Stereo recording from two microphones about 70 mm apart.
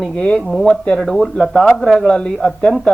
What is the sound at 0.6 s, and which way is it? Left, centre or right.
Speech, centre.